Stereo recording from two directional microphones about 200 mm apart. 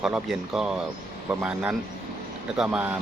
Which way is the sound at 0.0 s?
Centre (ahead or behind).